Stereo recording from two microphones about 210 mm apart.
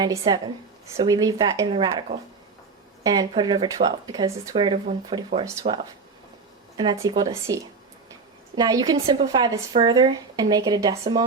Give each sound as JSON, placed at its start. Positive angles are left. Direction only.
{"t": 0.0, "sound": "speech", "side_deg": -20}